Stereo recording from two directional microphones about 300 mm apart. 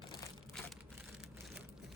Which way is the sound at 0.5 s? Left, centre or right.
Centre.